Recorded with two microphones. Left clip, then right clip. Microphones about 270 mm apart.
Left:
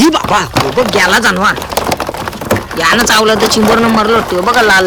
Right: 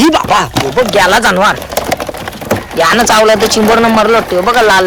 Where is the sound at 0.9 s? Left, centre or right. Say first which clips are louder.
Right 3 dB; centre.